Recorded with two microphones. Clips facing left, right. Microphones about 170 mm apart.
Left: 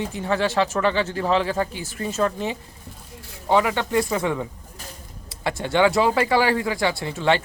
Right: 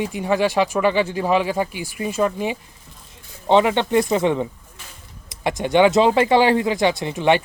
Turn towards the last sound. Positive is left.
turn(degrees=-15)  # may be behind; listen again after turning